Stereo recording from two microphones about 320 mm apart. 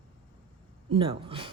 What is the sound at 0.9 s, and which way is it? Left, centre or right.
Speech, centre.